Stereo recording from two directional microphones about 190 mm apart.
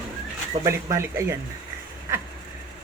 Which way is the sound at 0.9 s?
15° right (ahead or behind).